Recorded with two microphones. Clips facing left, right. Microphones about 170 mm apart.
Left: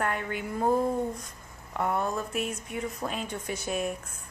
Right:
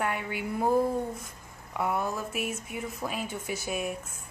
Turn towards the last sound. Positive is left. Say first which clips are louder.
# left 1 dB
turn(degrees=-5)  # may be behind; listen again after turning